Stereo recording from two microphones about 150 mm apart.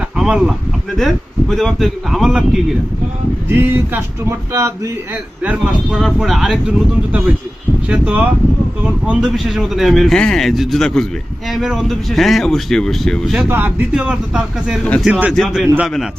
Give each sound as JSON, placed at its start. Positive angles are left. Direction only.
{"t": 0.2, "sound": "speech", "side_deg": -5}
{"t": 3.5, "sound": "male singing", "side_deg": -15}
{"t": 6.0, "sound": "speech", "side_deg": 0}
{"t": 7.9, "sound": "male singing", "side_deg": -10}
{"t": 8.8, "sound": "speech", "side_deg": -5}
{"t": 13.5, "sound": "male singing", "side_deg": -10}
{"t": 15.0, "sound": "speech", "side_deg": -5}